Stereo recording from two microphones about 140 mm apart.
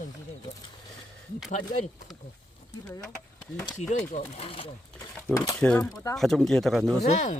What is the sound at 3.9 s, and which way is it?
Speech, 50° left (ahead or behind).